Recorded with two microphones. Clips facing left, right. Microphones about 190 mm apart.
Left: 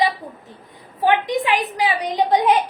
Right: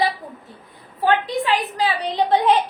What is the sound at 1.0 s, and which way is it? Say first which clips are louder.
A woman's voice: left 1 dB; 15° left (ahead or behind).